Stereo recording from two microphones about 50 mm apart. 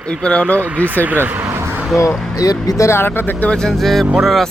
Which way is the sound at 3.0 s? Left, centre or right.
Left.